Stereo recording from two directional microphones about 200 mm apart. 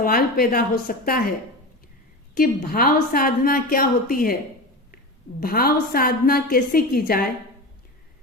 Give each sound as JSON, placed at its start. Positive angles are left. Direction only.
{"t": 0.0, "sound": "a woman's voice", "side_deg": 45}
{"t": 2.3, "sound": "a woman's voice", "side_deg": 45}
{"t": 5.4, "sound": "a woman's voice", "side_deg": 50}